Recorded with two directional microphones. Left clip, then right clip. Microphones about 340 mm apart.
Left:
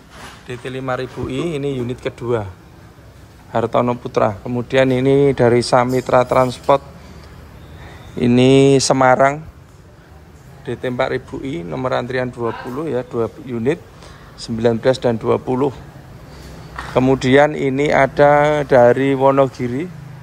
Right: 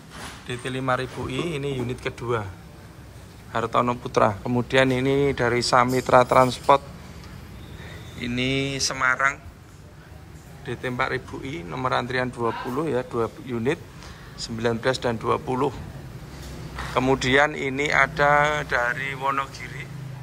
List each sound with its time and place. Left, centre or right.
0.5 s speech: centre
3.5 s speech: centre
8.9 s speech: centre
10.6 s speech: centre
16.9 s speech: centre